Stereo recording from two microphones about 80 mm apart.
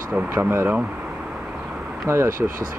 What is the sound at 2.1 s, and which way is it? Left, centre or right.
Speech, right.